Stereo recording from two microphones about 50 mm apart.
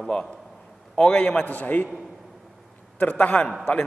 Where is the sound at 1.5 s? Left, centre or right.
Left.